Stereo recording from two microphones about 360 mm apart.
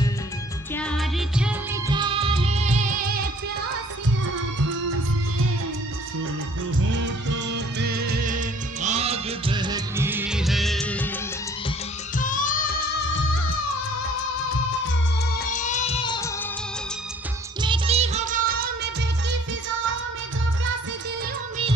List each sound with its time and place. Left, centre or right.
0.7 s music: centre
7.5 s music of bollywood: right; by 11.1 s centre
12.2 s music: left
15.3 s music of bollywood: left
17.6 s music of bollywood: centre